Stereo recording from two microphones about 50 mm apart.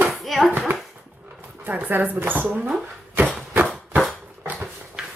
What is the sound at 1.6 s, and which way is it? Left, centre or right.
Speech, right.